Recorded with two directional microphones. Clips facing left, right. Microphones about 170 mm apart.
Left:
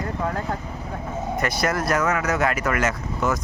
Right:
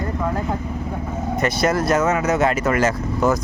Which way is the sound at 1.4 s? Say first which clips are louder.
Right 5 dB; 25° right (ahead or behind).